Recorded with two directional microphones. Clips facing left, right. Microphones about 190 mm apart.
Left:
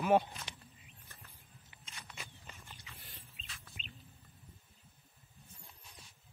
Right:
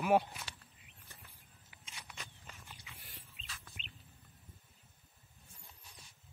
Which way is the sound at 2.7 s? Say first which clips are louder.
Left 1 dB; 10° right (ahead or behind).